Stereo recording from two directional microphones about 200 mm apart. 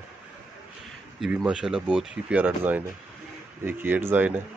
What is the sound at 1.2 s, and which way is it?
Speech, 5° right (ahead or behind).